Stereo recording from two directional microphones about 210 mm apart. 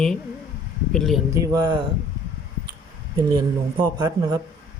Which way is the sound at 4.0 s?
20° right (ahead or behind).